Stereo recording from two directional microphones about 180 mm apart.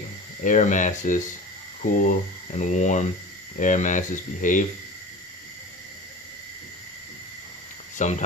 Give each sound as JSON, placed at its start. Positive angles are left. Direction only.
{"t": 0.4, "sound": "speech", "side_deg": 45}
{"t": 8.0, "sound": "speech", "side_deg": 45}